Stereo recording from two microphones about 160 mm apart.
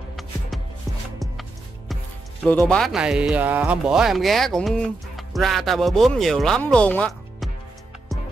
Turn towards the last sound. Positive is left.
turn(degrees=10)  # may be behind; listen again after turning